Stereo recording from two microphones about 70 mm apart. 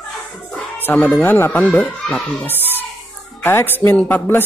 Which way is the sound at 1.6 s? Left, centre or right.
Left.